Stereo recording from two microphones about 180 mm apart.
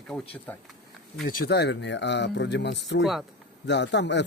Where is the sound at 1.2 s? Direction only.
55° left (ahead or behind); by 3.0 s 70° left (ahead or behind).